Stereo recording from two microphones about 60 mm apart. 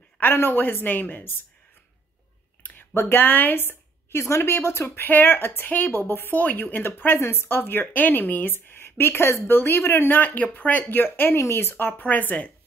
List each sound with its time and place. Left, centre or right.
0.2 s speech: left
2.6 s a woman's voice: left
4.8 s speech: left
7.2 s speech: left
7.4 s speech: left